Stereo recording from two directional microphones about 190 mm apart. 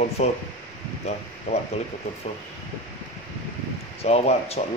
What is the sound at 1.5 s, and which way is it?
Speech, 35° left (ahead or behind).